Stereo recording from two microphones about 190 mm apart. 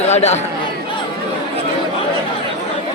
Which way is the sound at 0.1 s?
35° left (ahead or behind).